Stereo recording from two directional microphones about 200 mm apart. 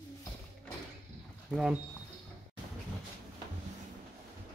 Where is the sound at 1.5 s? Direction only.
5° right (ahead or behind).